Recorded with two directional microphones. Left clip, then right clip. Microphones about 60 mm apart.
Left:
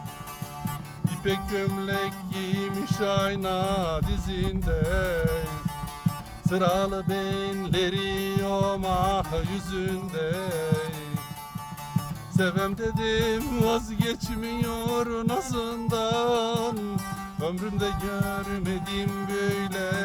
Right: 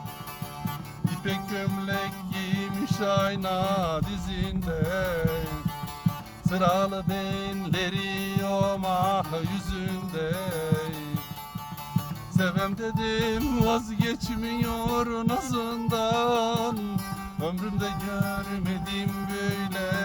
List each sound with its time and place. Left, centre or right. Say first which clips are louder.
1.2 s music: left 5 dB; left
5.4 s music: left 1 dB; left
6.4 s music: even; left
12.3 s music: left 1 dB; left
18.0 s music: left 1 dB; left